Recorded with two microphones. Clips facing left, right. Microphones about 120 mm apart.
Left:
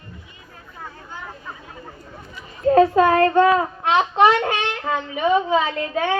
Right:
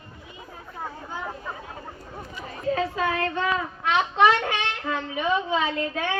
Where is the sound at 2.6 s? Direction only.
50° left (ahead or behind).